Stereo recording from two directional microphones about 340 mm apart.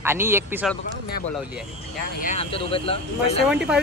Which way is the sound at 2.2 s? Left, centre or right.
Centre.